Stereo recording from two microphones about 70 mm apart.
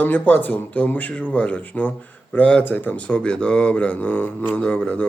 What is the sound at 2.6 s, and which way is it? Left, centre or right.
A man's voice, left.